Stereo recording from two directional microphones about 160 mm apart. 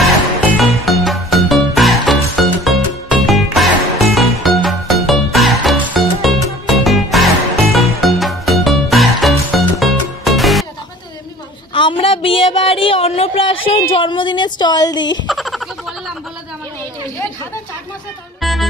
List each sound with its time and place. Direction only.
0.0 s music: centre (ahead or behind)
11.7 s a sound: 35° left (ahead or behind)
15.2 s frog: centre (ahead or behind)
18.4 s music: centre (ahead or behind)